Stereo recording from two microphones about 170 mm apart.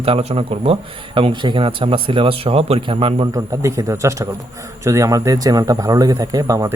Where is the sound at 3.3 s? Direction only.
20° right (ahead or behind).